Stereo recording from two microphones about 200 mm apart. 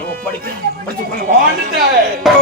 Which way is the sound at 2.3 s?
Centre (ahead or behind).